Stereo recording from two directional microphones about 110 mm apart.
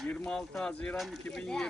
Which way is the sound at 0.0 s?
10° left (ahead or behind).